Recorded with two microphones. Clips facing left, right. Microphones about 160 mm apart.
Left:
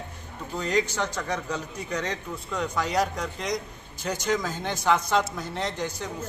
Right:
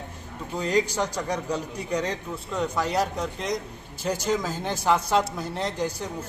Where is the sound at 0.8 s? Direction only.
35° right (ahead or behind).